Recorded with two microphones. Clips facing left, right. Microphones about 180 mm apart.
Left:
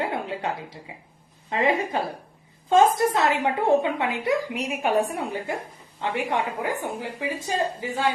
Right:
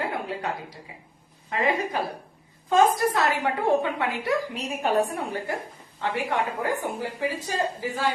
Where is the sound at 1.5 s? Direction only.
25° left (ahead or behind).